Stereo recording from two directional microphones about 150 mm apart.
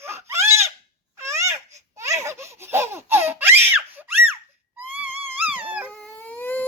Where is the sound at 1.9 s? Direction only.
20° right (ahead or behind).